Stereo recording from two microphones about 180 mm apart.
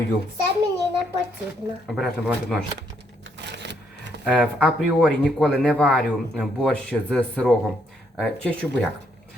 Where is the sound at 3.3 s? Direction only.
70° right (ahead or behind).